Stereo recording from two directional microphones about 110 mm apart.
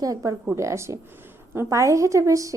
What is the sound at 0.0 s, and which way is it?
A woman's voice, 30° right (ahead or behind).